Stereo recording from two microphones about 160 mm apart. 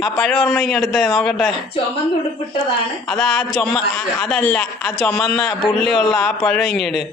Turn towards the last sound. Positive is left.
turn(degrees=5)  # may be behind; listen again after turning